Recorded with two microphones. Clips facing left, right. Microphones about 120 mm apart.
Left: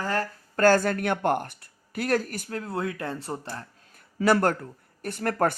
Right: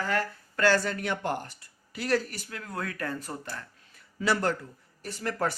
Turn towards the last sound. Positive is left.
turn(degrees=55)  # may be behind; listen again after turning